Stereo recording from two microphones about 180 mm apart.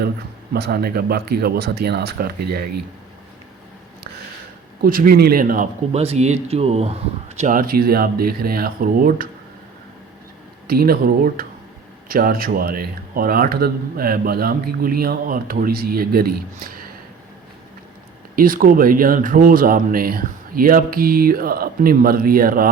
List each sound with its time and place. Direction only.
0.5 s a man's voice: 60° right (ahead or behind)
4.8 s speech: 55° right (ahead or behind)
5.9 s speech: 35° right (ahead or behind); by 9.3 s 50° right (ahead or behind)
10.7 s a man's voice: 55° right (ahead or behind)
18.3 s speech: 50° right (ahead or behind)